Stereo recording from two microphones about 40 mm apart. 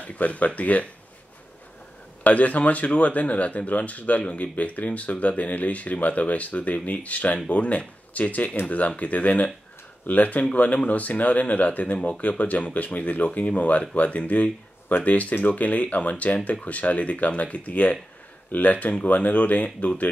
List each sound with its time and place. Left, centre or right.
0.0 s speech: left
2.2 s speech: left